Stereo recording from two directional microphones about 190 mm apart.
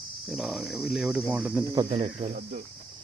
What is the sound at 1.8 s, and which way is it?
Speech, 35° right (ahead or behind).